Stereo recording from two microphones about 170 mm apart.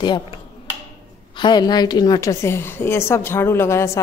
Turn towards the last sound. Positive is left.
turn(degrees=15)  # may be behind; listen again after turning